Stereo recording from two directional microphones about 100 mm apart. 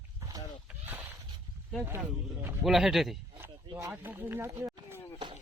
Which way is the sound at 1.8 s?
20° right (ahead or behind).